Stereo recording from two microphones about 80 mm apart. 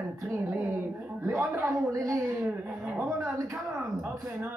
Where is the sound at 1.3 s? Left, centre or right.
Right.